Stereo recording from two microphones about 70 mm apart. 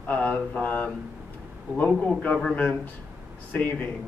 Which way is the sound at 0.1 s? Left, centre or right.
Left.